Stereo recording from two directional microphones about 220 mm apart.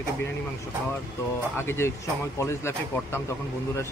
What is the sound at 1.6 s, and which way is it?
Speech, 10° left (ahead or behind).